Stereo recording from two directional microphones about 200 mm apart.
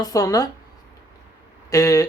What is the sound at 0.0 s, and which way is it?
Speech, 15° left (ahead or behind).